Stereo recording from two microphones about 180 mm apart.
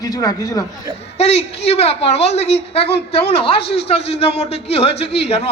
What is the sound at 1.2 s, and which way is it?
A man's voice, 35° left (ahead or behind).